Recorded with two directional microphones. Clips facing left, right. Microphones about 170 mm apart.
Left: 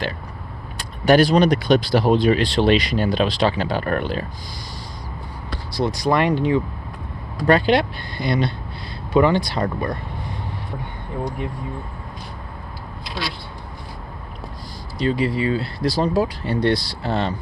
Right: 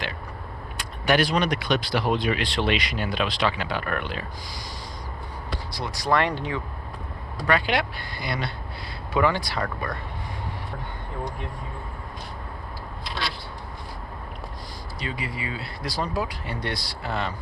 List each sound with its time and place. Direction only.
0.8 s speech: 35° left (ahead or behind)
5.7 s speech: 25° left (ahead or behind)
7.4 s speech: 30° left (ahead or behind)
15.0 s speech: 30° left (ahead or behind)